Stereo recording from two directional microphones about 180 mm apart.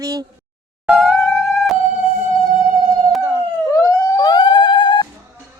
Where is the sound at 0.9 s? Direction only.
Centre (ahead or behind).